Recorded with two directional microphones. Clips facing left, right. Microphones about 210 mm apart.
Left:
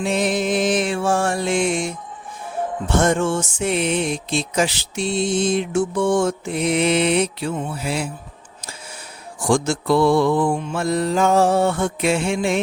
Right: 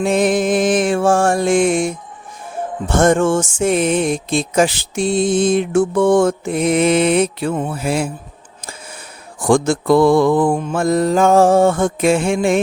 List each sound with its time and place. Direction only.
0.0 s music: 50° right (ahead or behind)
9.4 s music: 55° right (ahead or behind)